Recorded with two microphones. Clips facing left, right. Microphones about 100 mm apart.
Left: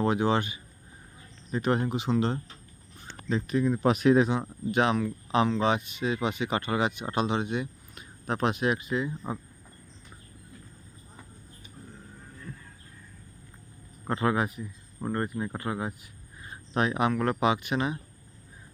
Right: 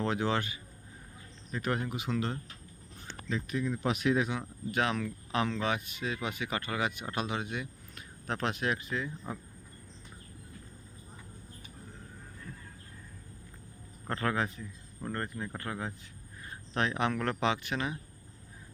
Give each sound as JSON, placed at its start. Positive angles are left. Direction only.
{"t": 0.0, "sound": "speech", "side_deg": 15}
{"t": 14.1, "sound": "a man's voice", "side_deg": 15}